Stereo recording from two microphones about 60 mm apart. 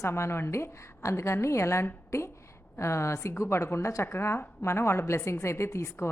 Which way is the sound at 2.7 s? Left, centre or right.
Left.